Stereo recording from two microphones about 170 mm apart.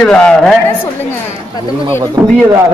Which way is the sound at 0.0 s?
5° left (ahead or behind).